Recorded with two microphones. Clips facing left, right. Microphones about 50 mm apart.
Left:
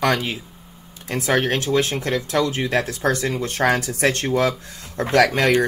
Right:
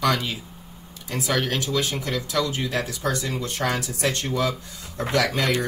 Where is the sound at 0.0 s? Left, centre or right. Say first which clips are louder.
Left 3 dB; left.